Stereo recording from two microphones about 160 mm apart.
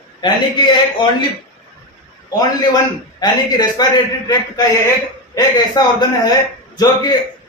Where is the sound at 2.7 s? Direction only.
25° left (ahead or behind).